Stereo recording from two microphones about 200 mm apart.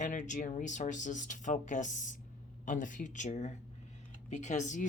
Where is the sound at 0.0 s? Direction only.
40° left (ahead or behind).